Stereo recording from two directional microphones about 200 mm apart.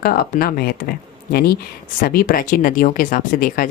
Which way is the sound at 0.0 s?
50° left (ahead or behind).